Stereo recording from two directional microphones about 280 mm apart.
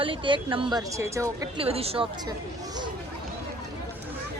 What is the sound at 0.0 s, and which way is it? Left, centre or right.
Speech, centre.